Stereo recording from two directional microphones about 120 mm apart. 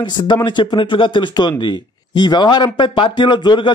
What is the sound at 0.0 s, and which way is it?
A man's voice, 40° left (ahead or behind).